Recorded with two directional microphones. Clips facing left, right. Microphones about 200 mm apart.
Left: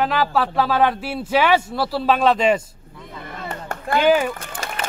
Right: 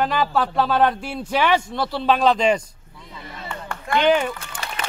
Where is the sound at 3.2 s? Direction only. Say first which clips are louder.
Left 2 dB; 45° left (ahead or behind).